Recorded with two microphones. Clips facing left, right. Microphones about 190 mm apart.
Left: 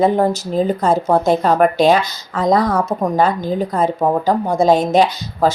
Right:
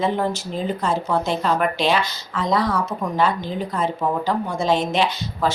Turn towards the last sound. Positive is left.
turn(degrees=40)  # may be behind; listen again after turning